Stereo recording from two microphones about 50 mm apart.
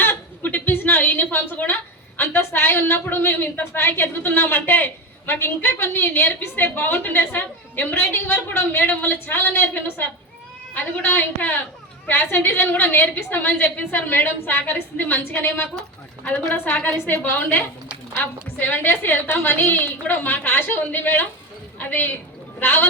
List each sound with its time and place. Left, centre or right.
0.4 s a woman's voice: left
5.4 s a woman's voice: left
6.7 s a woman's voice: left
16.8 s a woman's voice: left
18.6 s a woman's voice: left